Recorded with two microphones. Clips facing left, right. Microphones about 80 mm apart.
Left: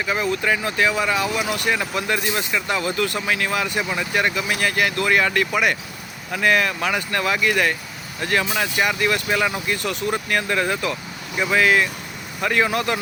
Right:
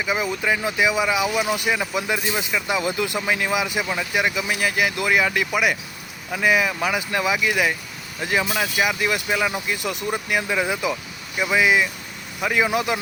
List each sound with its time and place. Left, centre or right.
0.0 s speech: centre